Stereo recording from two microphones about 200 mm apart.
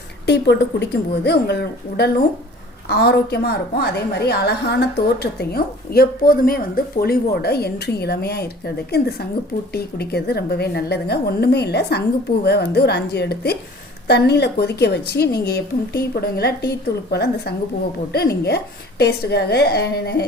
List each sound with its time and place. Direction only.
0.3 s a woman's voice: 55° left (ahead or behind)